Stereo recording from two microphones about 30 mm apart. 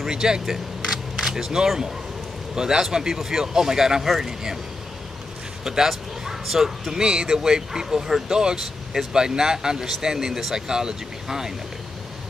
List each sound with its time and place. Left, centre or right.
0.1 s speech: right
4.0 s speech: centre
4.3 s speech: centre
5.6 s a sound: centre
6.4 s speech: centre
7.0 s speech: right